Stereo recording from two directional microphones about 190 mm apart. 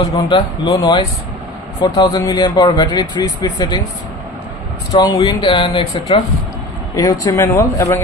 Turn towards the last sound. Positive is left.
turn(degrees=15)  # may be behind; listen again after turning